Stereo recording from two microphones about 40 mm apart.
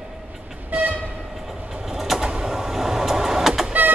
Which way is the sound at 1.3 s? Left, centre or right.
Centre.